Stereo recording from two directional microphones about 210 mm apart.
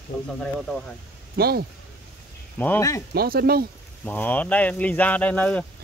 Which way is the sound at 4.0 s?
10° left (ahead or behind).